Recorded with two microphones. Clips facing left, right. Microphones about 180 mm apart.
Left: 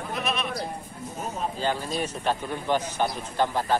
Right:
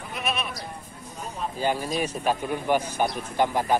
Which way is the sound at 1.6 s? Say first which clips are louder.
Right 4 dB; 10° right (ahead or behind).